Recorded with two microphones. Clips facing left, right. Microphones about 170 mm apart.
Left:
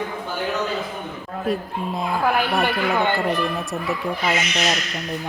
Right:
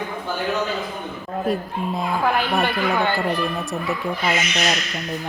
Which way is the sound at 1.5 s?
Centre (ahead or behind).